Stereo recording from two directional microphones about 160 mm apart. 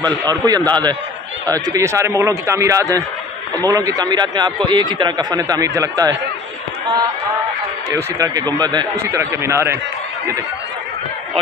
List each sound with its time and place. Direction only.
0.0 s a man's voice: 25° right (ahead or behind)
7.9 s a man's voice: 20° right (ahead or behind)